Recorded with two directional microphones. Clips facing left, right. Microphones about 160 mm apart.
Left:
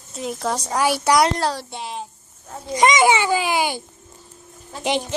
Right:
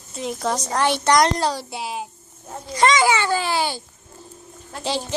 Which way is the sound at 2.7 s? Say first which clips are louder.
Left 2 dB; 15° left (ahead or behind).